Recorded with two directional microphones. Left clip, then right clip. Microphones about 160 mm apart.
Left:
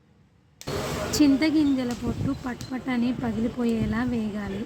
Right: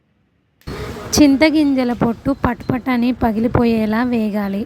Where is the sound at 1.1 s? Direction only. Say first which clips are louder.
Right 10 dB; 55° right (ahead or behind).